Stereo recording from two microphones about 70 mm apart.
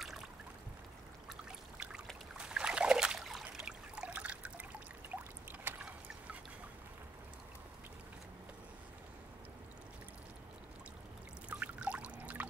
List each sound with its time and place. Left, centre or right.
1.3 s trickle: centre
2.3 s a sound: centre; by 5.8 s right
11.6 s pour: centre